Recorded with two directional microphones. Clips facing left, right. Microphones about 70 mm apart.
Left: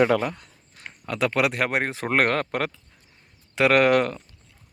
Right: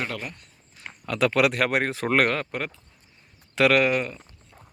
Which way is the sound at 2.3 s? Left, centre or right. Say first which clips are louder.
Left 4 dB; left.